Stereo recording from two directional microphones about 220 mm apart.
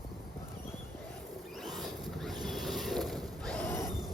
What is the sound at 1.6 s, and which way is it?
Boat, centre (ahead or behind).